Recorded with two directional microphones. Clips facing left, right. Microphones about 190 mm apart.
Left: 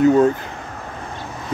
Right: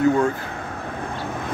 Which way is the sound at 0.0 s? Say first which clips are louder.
Left 5 dB; 20° left (ahead or behind).